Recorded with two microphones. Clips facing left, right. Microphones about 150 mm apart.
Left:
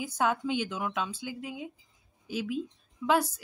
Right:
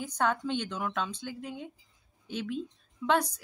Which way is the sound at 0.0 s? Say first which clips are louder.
Left 1 dB; 10° left (ahead or behind).